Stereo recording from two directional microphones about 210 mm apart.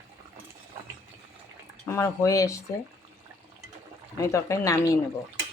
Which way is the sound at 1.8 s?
15° left (ahead or behind).